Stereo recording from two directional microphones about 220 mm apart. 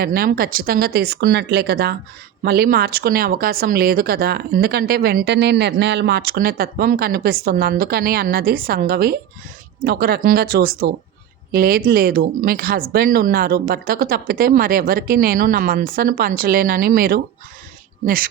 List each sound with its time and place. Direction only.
0.0 s speech: 45° right (ahead or behind)